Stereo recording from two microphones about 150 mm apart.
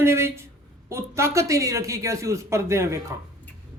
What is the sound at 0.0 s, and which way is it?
Speech, 15° right (ahead or behind).